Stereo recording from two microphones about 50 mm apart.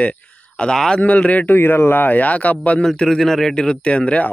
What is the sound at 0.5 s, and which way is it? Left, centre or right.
Speech, centre.